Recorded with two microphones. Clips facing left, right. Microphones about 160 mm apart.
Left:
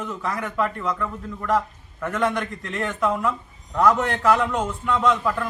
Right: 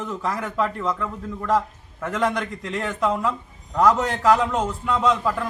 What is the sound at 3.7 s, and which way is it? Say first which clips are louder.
Speech: right 1 dB; 5° right (ahead or behind).